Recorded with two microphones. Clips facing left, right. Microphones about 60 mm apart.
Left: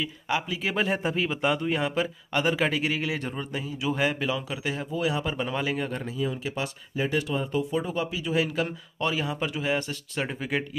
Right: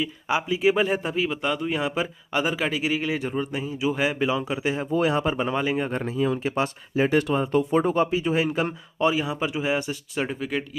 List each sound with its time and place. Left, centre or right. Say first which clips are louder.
0.0 s speech: right 3 dB; centre
0.8 s a man's voice: right 2 dB; centre
3.6 s speech: right 2 dB; right
3.9 s speech: right 1 dB; centre
4.3 s speech: right 5 dB; right
4.9 s speech: right 6 dB; right
5.3 s speech: right 4 dB; right
5.9 s speech: right 5 dB; right
9.0 s speech: right 5 dB; centre
10.2 s a man's voice: right 1 dB; centre